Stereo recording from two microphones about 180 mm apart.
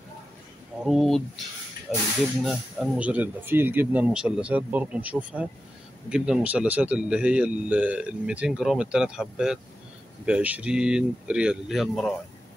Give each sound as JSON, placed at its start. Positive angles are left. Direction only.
{"t": 0.8, "sound": "speech", "side_deg": 0}